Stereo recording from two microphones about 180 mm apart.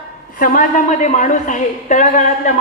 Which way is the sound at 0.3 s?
50° left (ahead or behind).